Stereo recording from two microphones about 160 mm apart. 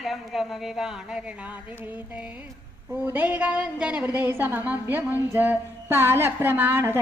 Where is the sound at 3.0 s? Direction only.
10° right (ahead or behind).